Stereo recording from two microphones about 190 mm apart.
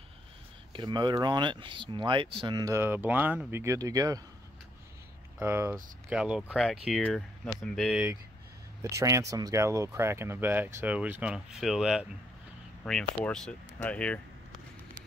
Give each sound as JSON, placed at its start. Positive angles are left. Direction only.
{"t": 0.7, "sound": "speech", "side_deg": -25}
{"t": 5.4, "sound": "speech", "side_deg": -10}
{"t": 8.9, "sound": "speech", "side_deg": -15}
{"t": 13.2, "sound": "speech", "side_deg": 5}